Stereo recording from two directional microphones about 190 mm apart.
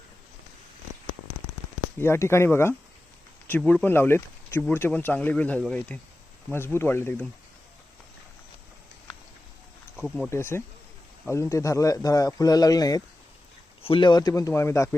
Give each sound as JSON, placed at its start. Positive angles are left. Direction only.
{"t": 2.0, "sound": "speech", "side_deg": 15}
{"t": 10.2, "sound": "speech", "side_deg": 15}